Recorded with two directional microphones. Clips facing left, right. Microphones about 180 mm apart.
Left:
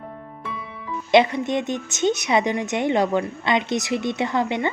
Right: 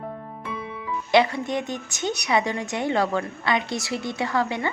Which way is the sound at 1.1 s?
20° left (ahead or behind).